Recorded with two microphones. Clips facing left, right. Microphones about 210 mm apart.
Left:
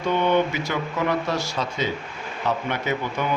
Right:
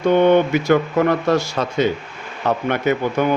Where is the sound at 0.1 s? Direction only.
55° right (ahead or behind).